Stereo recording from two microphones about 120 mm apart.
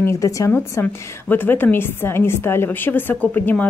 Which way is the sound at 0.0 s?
25° left (ahead or behind).